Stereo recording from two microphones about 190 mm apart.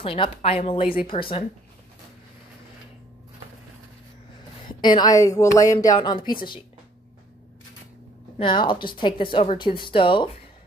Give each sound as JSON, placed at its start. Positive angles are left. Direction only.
{"t": 0.0, "sound": "a woman's voice", "side_deg": 30}
{"t": 4.8, "sound": "a woman's voice", "side_deg": 20}
{"t": 8.4, "sound": "a woman's voice", "side_deg": 25}